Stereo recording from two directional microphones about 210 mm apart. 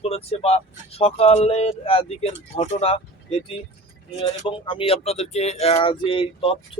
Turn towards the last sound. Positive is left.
turn(degrees=25)  # may be behind; listen again after turning